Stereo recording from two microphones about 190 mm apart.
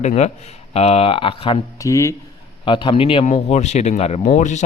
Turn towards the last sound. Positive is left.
turn(degrees=40)  # may be behind; listen again after turning